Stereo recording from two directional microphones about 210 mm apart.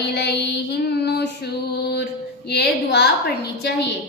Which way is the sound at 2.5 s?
50° left (ahead or behind).